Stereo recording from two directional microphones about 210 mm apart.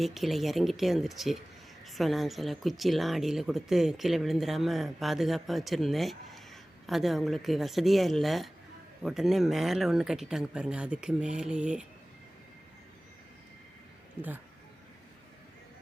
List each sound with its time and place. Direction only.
0.0 s speech: centre (ahead or behind)
14.2 s speech: 10° right (ahead or behind)